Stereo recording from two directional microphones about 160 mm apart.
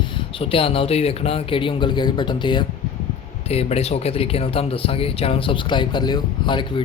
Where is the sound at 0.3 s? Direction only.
35° left (ahead or behind).